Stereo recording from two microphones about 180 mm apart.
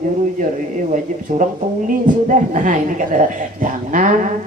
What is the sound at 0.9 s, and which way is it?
A woman's voice, 45° right (ahead or behind).